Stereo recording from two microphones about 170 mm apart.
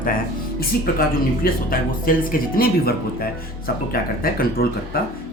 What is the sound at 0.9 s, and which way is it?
Speech, 60° left (ahead or behind).